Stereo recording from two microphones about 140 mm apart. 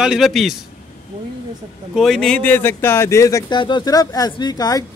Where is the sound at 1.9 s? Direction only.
Centre (ahead or behind); by 4.8 s 25° left (ahead or behind).